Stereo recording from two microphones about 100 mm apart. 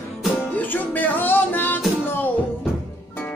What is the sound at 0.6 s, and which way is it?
Music, 15° left (ahead or behind).